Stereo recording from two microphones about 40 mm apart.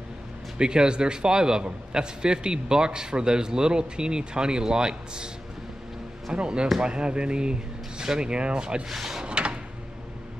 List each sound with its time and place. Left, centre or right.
0.6 s a man's voice: right
6.3 s a man's voice: right
8.8 s speech: centre
9.2 s a sound: right